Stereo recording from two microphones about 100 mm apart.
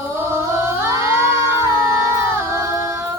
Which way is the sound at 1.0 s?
30° right (ahead or behind).